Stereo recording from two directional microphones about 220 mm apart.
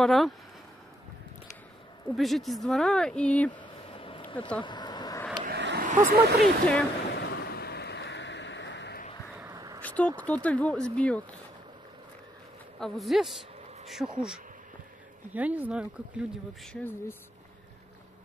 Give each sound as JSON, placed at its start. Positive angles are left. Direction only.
{"t": 0.0, "sound": "speech", "side_deg": 0}
{"t": 2.1, "sound": "speech", "side_deg": 0}
{"t": 3.9, "sound": "a sound", "side_deg": 25}
{"t": 4.6, "sound": "vehicle", "side_deg": 20}
{"t": 5.4, "sound": "a sound", "side_deg": -50}
{"t": 5.9, "sound": "speech", "side_deg": -40}
{"t": 6.4, "sound": "speech", "side_deg": 0}
{"t": 7.1, "sound": "a sound", "side_deg": 50}
{"t": 9.4, "sound": "a sound", "side_deg": -15}
{"t": 9.8, "sound": "speech", "side_deg": 5}
{"t": 12.8, "sound": "speech", "side_deg": 0}
{"t": 15.3, "sound": "speech", "side_deg": -5}